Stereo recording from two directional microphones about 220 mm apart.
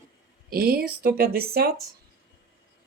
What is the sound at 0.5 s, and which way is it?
Speech, 45° right (ahead or behind).